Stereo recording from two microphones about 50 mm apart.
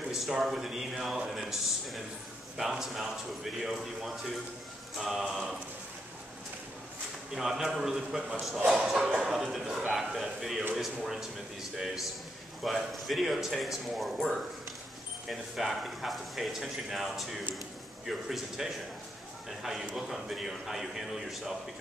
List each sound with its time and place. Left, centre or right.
0.1 s a man's voice: centre
7.3 s speech: centre
8.2 s a man's voice: centre